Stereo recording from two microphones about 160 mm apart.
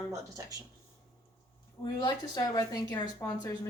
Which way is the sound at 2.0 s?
25° left (ahead or behind).